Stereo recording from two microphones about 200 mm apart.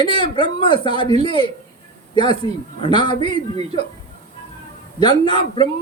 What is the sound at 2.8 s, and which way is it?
Speech, 20° left (ahead or behind).